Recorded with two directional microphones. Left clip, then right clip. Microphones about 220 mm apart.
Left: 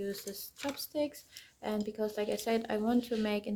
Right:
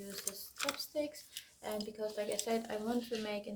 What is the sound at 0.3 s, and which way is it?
Speech, 45° left (ahead or behind).